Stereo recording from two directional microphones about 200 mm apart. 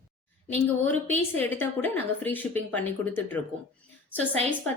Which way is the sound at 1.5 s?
10° left (ahead or behind).